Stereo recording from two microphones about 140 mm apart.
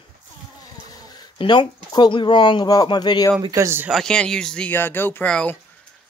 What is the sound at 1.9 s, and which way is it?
Speech, 30° left (ahead or behind).